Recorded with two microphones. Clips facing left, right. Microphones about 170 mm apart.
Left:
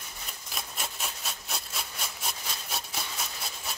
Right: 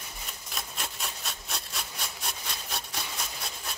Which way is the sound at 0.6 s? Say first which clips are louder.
Even; centre (ahead or behind).